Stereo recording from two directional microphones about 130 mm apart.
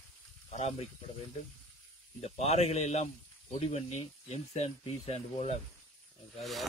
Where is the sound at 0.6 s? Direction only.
55° left (ahead or behind).